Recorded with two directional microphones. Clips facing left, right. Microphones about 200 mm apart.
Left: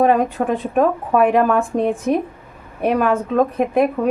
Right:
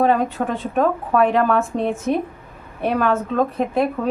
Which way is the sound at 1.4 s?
15° left (ahead or behind).